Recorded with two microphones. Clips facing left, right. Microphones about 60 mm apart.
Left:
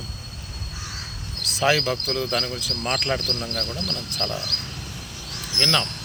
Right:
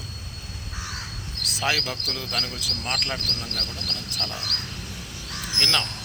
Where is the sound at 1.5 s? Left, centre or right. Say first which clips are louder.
Left 5 dB; centre.